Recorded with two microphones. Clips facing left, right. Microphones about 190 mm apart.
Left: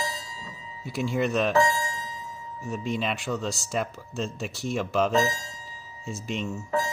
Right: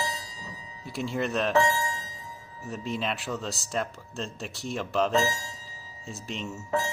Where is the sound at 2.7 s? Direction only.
Centre (ahead or behind).